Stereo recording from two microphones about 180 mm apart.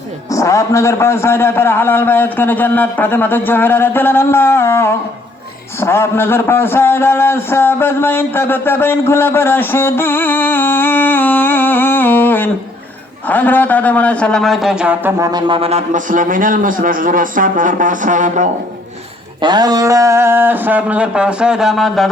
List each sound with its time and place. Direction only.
0.3 s a man's voice: 20° left (ahead or behind); by 15.1 s 5° right (ahead or behind)
15.2 s a man's voice: 25° right (ahead or behind); by 18.4 s 45° right (ahead or behind)
19.4 s speech: 25° right (ahead or behind); by 22.1 s centre (ahead or behind)